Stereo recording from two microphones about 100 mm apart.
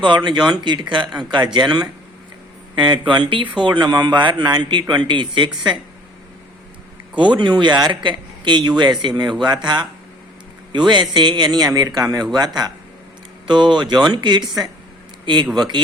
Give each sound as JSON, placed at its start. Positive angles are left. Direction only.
{"t": 0.3, "sound": "speech", "side_deg": -50}
{"t": 7.2, "sound": "a man's voice", "side_deg": -50}
{"t": 13.5, "sound": "speech", "side_deg": -50}
{"t": 15.5, "sound": "speech", "side_deg": -45}